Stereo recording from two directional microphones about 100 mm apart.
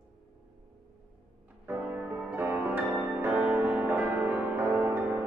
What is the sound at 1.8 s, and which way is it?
Music, 15° right (ahead or behind).